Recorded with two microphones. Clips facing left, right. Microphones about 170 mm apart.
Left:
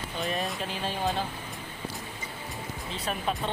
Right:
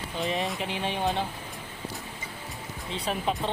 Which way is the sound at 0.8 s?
20° right (ahead or behind).